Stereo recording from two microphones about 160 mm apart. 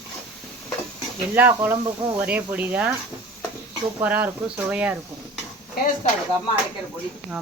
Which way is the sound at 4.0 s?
10° right (ahead or behind).